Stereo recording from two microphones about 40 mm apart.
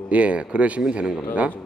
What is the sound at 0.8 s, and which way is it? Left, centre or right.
Speech, right.